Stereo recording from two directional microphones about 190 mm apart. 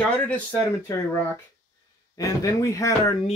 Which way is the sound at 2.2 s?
15° left (ahead or behind).